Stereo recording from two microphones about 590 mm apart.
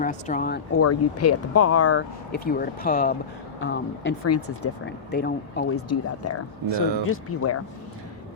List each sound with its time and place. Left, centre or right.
0.0 s speech: centre